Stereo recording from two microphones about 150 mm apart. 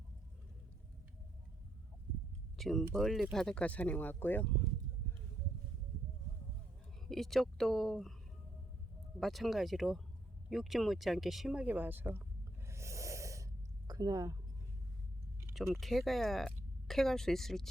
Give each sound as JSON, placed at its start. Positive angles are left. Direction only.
{"t": 2.6, "sound": "speech", "side_deg": 5}
{"t": 7.1, "sound": "speech", "side_deg": 0}
{"t": 9.2, "sound": "speech", "side_deg": 0}
{"t": 12.6, "sound": "snort", "side_deg": -20}
{"t": 15.7, "sound": "speech", "side_deg": 0}